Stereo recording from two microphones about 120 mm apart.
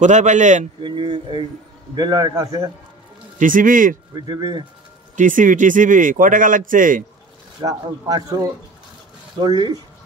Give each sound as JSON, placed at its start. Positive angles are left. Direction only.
{"t": 0.0, "sound": "a man's voice", "side_deg": -90}
{"t": 0.7, "sound": "speech", "side_deg": -40}
{"t": 3.3, "sound": "a man's voice", "side_deg": -90}
{"t": 4.1, "sound": "speech", "side_deg": -35}
{"t": 5.1, "sound": "a man's voice", "side_deg": -90}
{"t": 7.6, "sound": "speech", "side_deg": -30}